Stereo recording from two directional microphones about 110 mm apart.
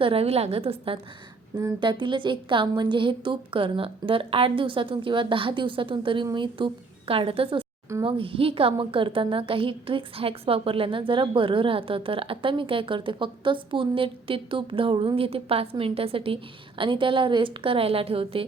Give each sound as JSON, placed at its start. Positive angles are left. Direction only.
{"t": 0.0, "sound": "a woman's voice", "side_deg": -60}
{"t": 1.8, "sound": "a woman's voice", "side_deg": -45}